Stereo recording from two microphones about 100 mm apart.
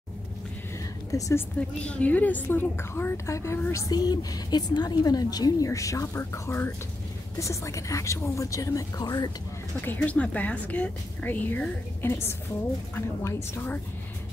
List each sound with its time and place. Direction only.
1.1 s a woman's voice: 35° left (ahead or behind)
1.6 s a woman's voice: 10° left (ahead or behind); by 3.5 s 30° left (ahead or behind)
3.7 s a woman's voice: 40° left (ahead or behind)
9.8 s a woman's voice: 15° left (ahead or behind)